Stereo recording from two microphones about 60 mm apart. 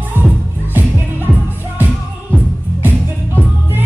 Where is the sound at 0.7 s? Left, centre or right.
Right.